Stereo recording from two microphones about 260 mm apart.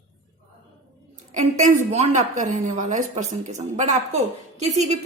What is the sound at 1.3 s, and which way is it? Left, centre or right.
A woman's voice, right.